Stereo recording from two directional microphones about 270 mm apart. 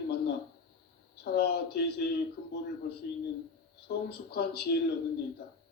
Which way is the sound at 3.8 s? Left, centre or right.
Left.